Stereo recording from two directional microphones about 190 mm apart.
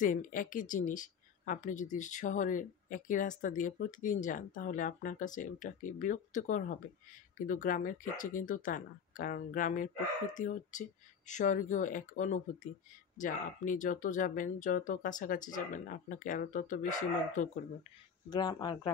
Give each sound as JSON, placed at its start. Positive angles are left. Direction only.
{"t": 0.0, "sound": "speech", "side_deg": 45}
{"t": 18.3, "sound": "speech", "side_deg": 20}